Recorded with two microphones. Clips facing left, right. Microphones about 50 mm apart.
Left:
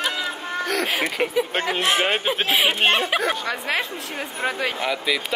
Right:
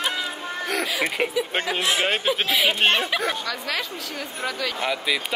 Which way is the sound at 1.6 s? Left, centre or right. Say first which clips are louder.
Left 2 dB; left.